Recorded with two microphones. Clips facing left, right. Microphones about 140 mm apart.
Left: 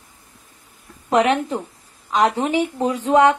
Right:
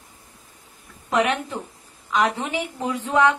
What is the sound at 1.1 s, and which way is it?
A woman's voice, 30° left (ahead or behind).